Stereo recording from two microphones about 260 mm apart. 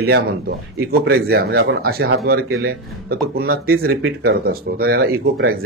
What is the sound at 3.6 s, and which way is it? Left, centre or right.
A man's voice, right.